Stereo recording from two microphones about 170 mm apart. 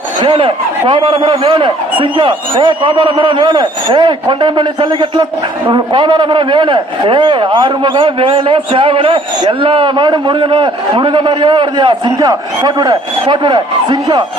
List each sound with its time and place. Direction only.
0.2 s a man's voice: 30° right (ahead or behind)